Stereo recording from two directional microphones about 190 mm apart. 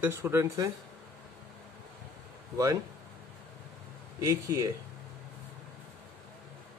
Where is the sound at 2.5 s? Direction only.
20° right (ahead or behind).